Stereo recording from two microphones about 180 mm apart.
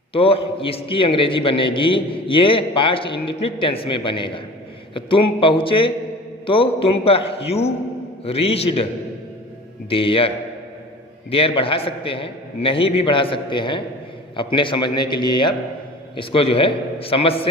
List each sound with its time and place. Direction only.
0.1 s a man's voice: 30° left (ahead or behind)
9.9 s a man's voice: 30° left (ahead or behind)